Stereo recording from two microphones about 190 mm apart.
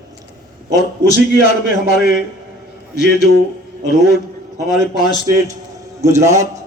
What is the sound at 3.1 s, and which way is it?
Speech, 55° left (ahead or behind).